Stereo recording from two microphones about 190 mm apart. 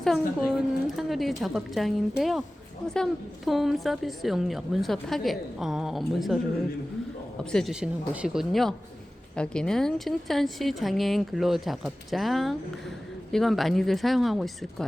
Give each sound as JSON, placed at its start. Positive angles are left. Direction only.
{"t": 0.0, "sound": "a woman's voice", "side_deg": 0}
{"t": 7.5, "sound": "a woman's voice", "side_deg": 0}